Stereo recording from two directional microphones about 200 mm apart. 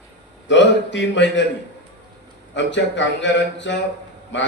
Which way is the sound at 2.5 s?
65° left (ahead or behind).